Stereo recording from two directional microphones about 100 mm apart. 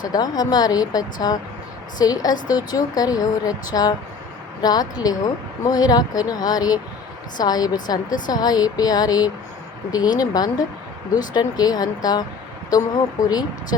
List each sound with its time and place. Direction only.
0.1 s a woman's voice: 40° left (ahead or behind)
13.2 s a woman's voice: 40° left (ahead or behind)